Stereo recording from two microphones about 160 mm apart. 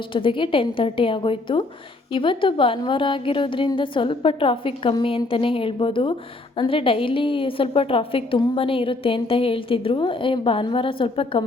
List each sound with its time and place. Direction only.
0.1 s a woman's voice: 30° left (ahead or behind)